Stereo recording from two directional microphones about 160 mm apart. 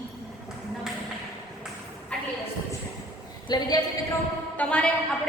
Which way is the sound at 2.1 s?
5° left (ahead or behind).